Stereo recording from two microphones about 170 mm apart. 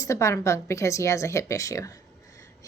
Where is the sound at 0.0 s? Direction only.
15° left (ahead or behind).